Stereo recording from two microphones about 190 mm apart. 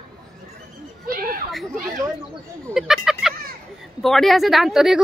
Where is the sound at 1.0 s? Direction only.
50° right (ahead or behind).